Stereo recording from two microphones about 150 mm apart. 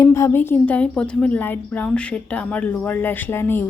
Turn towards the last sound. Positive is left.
turn(degrees=15)  # may be behind; listen again after turning